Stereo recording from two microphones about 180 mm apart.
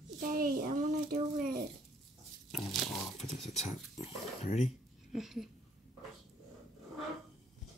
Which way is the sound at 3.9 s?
35° left (ahead or behind).